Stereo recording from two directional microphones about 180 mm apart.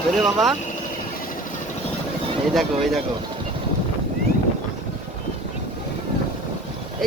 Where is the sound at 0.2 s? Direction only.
Centre (ahead or behind).